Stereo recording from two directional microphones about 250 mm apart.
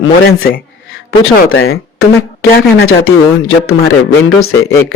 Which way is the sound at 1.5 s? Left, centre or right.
Left.